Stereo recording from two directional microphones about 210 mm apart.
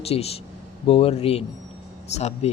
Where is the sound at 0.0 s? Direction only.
30° left (ahead or behind).